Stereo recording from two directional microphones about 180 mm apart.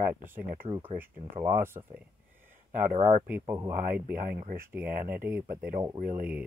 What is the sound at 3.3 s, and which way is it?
Speech, 15° right (ahead or behind).